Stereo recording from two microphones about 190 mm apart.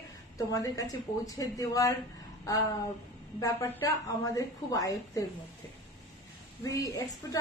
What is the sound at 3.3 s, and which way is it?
A woman's voice, 15° left (ahead or behind).